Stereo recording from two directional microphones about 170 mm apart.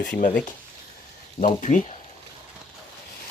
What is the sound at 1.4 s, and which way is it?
Speech, 45° left (ahead or behind).